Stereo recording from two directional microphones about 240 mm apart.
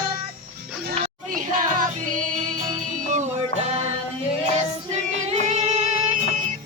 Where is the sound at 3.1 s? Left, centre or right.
Right.